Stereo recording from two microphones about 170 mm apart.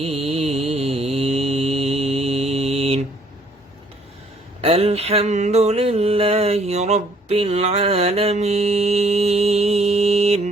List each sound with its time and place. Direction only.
0.0 s mantra: 35° right (ahead or behind)
4.6 s music: 35° right (ahead or behind)